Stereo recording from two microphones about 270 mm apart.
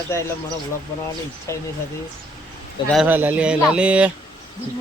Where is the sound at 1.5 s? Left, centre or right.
Centre.